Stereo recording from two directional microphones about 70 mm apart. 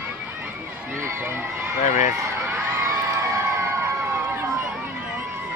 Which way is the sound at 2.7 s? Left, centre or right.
Right.